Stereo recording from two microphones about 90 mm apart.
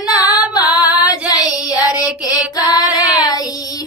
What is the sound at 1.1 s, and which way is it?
Child singing, 45° left (ahead or behind).